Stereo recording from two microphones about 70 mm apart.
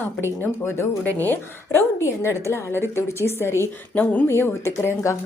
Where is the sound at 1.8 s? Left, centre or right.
Left.